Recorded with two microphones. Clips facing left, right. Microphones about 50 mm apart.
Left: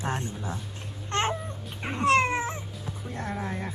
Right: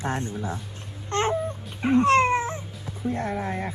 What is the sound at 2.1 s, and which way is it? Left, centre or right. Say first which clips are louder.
Dog: even; right.